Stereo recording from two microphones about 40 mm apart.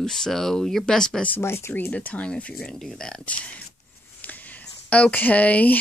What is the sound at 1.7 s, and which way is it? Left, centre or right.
Speech, left.